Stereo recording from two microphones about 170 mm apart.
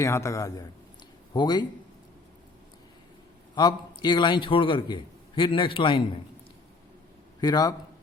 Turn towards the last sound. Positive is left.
turn(degrees=25)  # may be behind; listen again after turning